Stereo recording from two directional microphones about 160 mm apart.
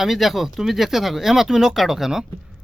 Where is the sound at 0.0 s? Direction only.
Centre (ahead or behind).